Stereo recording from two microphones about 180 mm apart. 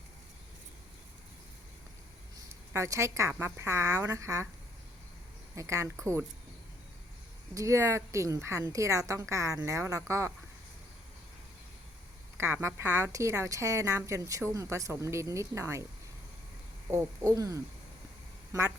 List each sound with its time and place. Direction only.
2.7 s a woman's voice: 15° right (ahead or behind)
5.5 s a woman's voice: 15° right (ahead or behind)
7.5 s a woman's voice: 15° right (ahead or behind)
12.4 s a woman's voice: 15° right (ahead or behind)
16.9 s a woman's voice: 15° right (ahead or behind)